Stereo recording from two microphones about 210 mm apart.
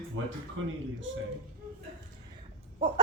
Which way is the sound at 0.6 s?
70° right (ahead or behind).